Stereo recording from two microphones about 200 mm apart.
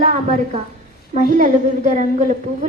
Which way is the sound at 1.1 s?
40° right (ahead or behind).